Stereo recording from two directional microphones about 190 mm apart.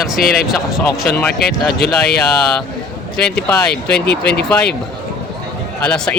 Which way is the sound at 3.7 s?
60° left (ahead or behind).